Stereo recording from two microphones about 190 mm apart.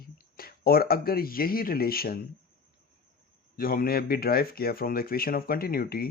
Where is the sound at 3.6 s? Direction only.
50° left (ahead or behind).